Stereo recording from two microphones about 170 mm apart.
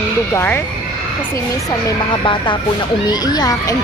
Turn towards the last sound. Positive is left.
turn(degrees=20)  # may be behind; listen again after turning